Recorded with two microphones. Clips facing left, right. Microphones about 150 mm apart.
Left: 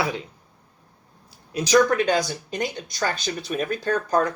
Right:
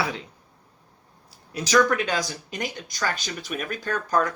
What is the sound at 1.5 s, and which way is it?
Speech, 20° left (ahead or behind).